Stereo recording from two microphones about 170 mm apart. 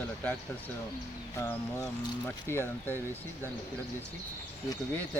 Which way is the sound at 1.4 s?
15° left (ahead or behind).